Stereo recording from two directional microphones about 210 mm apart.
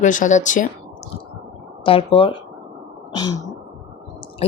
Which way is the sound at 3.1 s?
20° left (ahead or behind).